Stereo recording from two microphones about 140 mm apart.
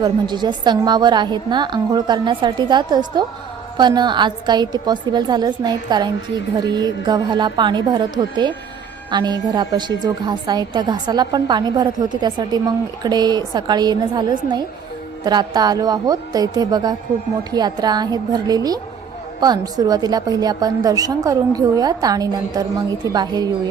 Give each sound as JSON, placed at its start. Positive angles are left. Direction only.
{"t": 0.0, "sound": "a woman's voice", "side_deg": -30}